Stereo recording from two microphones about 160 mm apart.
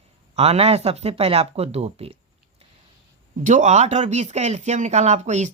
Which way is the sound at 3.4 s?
50° right (ahead or behind).